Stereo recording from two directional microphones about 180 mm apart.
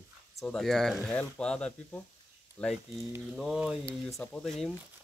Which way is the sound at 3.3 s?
Centre (ahead or behind).